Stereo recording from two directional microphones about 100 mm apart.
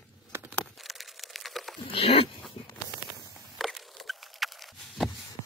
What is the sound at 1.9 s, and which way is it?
Dog, 70° left (ahead or behind).